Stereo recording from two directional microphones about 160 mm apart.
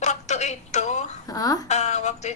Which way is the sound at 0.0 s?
45° left (ahead or behind).